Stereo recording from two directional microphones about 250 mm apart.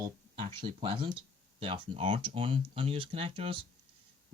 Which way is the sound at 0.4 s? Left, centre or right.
Centre.